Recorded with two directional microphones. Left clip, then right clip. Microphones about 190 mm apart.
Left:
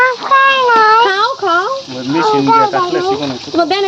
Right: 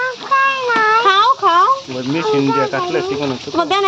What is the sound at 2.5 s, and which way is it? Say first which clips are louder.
Speech: left 6 dB; 35° right (ahead or behind).